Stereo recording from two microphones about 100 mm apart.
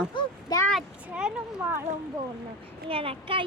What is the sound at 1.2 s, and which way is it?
Speech, 10° right (ahead or behind).